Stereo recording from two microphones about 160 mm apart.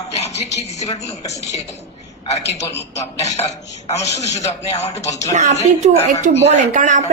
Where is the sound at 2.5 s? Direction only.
45° left (ahead or behind).